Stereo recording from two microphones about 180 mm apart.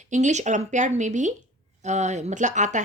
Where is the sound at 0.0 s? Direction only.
40° right (ahead or behind).